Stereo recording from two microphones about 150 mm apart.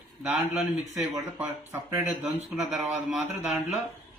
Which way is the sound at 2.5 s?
Centre (ahead or behind).